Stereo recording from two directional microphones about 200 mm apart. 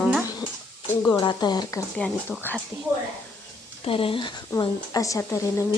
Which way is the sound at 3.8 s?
25° left (ahead or behind).